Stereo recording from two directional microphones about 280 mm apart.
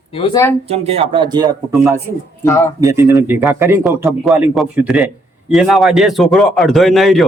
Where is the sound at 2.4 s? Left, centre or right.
Centre.